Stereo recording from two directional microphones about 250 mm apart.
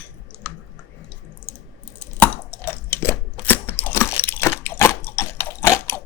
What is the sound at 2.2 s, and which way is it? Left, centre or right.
Chewing, centre.